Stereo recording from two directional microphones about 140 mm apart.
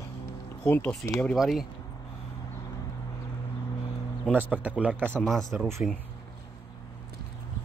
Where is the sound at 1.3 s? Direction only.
Centre (ahead or behind).